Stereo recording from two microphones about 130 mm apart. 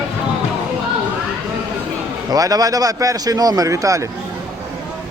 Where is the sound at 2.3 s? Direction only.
30° right (ahead or behind).